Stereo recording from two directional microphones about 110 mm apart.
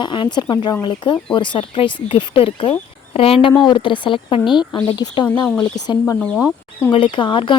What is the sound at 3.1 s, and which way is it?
Speech, 60° left (ahead or behind).